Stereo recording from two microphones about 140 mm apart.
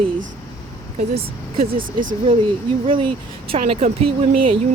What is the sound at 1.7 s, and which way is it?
Speech, 80° right.